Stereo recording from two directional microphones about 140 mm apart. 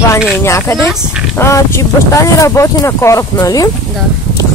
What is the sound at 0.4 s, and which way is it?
Speech, 20° left (ahead or behind).